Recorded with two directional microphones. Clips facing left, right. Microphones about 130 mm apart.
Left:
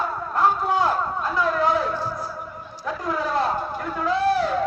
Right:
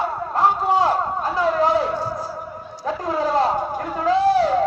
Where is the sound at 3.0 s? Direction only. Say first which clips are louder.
Right 4 dB; 35° right (ahead or behind).